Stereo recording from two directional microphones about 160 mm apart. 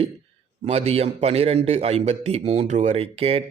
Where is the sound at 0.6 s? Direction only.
40° right (ahead or behind).